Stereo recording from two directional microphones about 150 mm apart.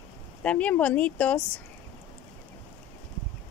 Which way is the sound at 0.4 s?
10° left (ahead or behind).